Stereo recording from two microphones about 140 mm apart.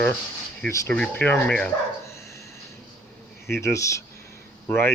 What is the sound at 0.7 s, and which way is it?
Speech, 20° left (ahead or behind).